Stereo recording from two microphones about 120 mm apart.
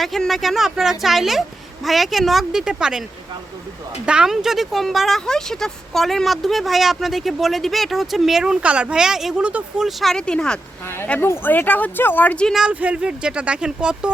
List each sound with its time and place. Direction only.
0.0 s speech: centre (ahead or behind)
4.0 s speech: 5° right (ahead or behind)
10.8 s speech: 20° left (ahead or behind)
12.5 s speech: 10° right (ahead or behind)